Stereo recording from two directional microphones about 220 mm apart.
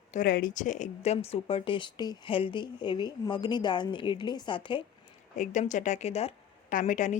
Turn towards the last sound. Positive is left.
turn(degrees=35)  # may be behind; listen again after turning